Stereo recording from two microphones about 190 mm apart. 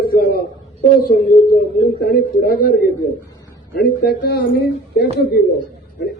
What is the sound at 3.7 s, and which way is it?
Speech, 55° left (ahead or behind).